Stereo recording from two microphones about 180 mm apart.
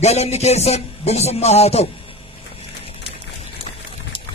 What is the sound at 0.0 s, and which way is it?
Speech, 35° left (ahead or behind).